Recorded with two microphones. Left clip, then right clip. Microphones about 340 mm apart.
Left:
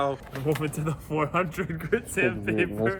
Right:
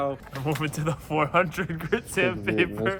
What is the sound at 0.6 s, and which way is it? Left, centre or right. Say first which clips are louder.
Speech: right 2 dB; centre.